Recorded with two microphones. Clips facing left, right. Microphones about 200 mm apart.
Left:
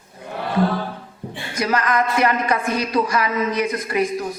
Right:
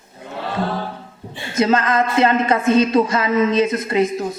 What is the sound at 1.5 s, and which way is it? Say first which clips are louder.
Speech: right 4 dB; 25° right (ahead or behind).